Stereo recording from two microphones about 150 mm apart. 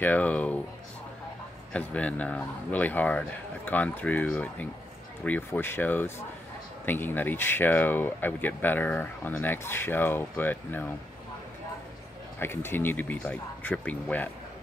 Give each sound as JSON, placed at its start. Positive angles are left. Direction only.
{"t": 0.0, "sound": "speech", "side_deg": 10}
{"t": 1.7, "sound": "speech", "side_deg": 10}
{"t": 12.4, "sound": "speech", "side_deg": 15}